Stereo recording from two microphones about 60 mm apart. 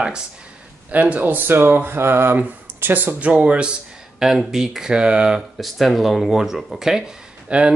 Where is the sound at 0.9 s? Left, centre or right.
Right.